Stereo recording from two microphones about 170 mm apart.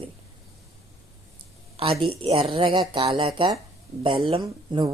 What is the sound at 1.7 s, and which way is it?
A woman's voice, 35° right (ahead or behind).